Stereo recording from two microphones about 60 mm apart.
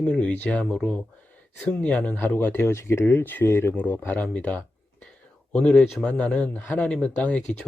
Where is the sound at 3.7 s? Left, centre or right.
Left.